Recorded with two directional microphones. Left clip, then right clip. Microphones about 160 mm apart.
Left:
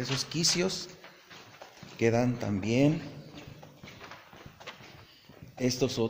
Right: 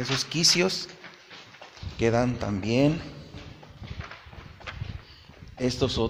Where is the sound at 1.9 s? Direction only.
Centre (ahead or behind).